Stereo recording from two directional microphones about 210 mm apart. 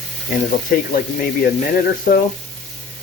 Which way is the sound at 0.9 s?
50° left (ahead or behind).